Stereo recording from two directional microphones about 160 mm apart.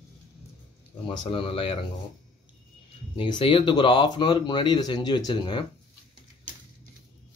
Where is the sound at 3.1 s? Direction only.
30° left (ahead or behind).